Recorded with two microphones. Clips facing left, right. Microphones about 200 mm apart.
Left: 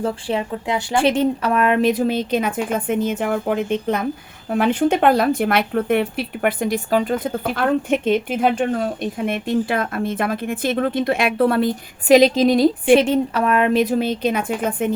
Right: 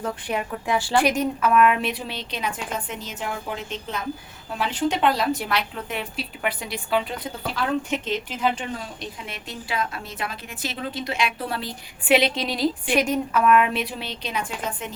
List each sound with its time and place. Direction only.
0.0 s speech: 30° left (ahead or behind); by 11.7 s 55° left (ahead or behind)
12.0 s a woman's voice: 40° left (ahead or behind)
12.8 s speech: 25° left (ahead or behind); by 14.9 s 55° left (ahead or behind)